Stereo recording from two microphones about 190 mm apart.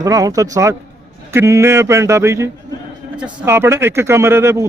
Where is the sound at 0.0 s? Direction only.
20° right (ahead or behind).